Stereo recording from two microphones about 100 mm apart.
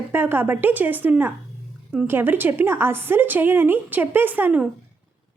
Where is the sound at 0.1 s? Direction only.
20° right (ahead or behind).